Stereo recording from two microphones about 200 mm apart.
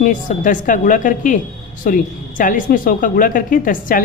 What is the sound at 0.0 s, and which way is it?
A woman's voice, 40° left (ahead or behind).